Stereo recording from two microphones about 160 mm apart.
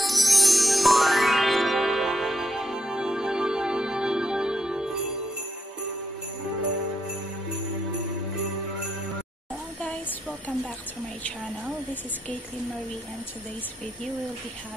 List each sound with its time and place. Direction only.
0.0 s music: centre (ahead or behind)